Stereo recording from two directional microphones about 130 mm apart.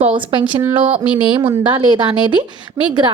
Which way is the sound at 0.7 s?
45° right (ahead or behind).